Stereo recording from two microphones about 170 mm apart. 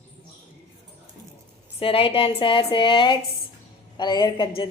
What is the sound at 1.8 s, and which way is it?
A woman's voice, 35° left (ahead or behind).